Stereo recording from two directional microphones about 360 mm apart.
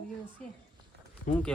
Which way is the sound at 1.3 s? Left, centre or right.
Left.